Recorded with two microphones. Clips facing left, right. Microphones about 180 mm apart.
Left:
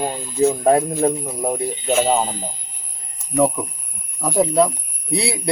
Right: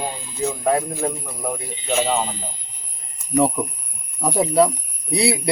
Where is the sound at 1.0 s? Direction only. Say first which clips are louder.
Left 6 dB; 30° left (ahead or behind).